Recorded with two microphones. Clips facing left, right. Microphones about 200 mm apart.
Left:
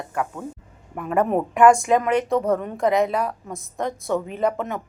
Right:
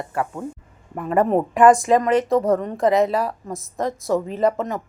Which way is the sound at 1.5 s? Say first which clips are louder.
Right 1 dB; centre (ahead or behind).